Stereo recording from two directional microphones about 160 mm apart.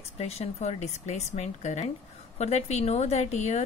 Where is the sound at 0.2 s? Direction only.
40° left (ahead or behind).